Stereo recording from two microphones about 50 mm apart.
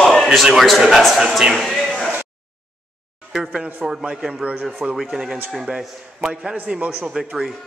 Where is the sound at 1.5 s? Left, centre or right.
Centre.